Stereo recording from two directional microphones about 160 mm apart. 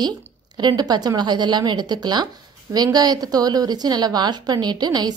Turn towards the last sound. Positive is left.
turn(degrees=-25)  # may be behind; listen again after turning